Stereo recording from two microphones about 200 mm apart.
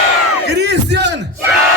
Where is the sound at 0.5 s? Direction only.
60° right (ahead or behind).